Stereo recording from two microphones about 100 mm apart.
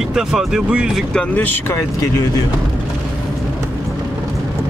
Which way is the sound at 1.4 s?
20° left (ahead or behind).